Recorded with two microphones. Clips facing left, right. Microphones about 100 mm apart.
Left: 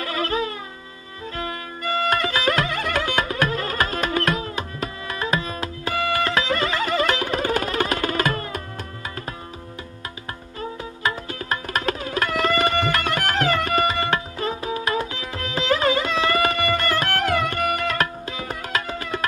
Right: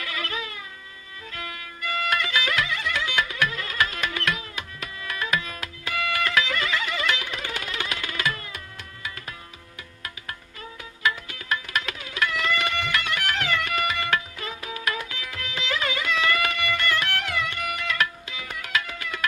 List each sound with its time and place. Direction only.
0.0 s music: 35° left (ahead or behind)
10.6 s music: 35° left (ahead or behind)